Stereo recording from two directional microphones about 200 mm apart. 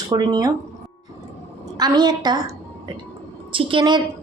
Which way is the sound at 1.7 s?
20° right (ahead or behind).